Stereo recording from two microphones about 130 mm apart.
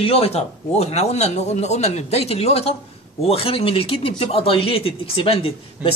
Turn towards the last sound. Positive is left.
turn(degrees=-10)  # may be behind; listen again after turning